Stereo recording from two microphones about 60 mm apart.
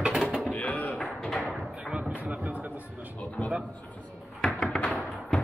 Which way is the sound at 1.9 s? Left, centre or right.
Right.